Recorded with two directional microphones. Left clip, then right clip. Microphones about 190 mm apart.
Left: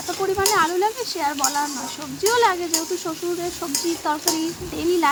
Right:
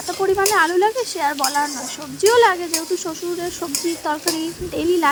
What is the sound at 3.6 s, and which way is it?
Speech, 15° right (ahead or behind).